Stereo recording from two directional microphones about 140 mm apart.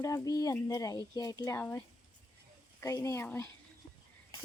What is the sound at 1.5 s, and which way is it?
Speech, 15° left (ahead or behind).